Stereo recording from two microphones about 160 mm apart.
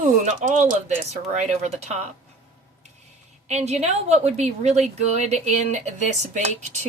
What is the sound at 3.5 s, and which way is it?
A woman's voice, 45° right (ahead or behind).